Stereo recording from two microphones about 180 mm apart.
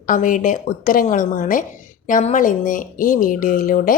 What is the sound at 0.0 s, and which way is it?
Speech, 50° left (ahead or behind).